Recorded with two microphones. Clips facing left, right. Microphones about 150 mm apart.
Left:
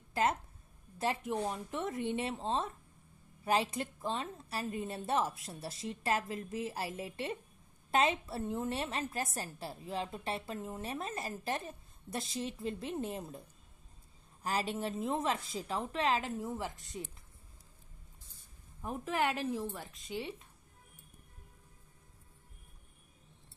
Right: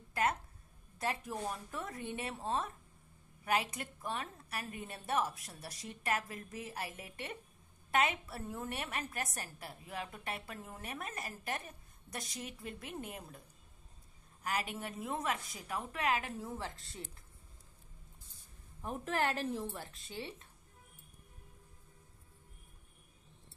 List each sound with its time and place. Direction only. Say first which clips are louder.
0.1 s a sound: left 2 dB; 25° left (ahead or behind)
0.9 s a woman's voice: left 4 dB; 25° left (ahead or behind)
14.4 s a woman's voice: left 4 dB; 30° left (ahead or behind)
19.8 s a woman's voice: left 4 dB; 20° left (ahead or behind)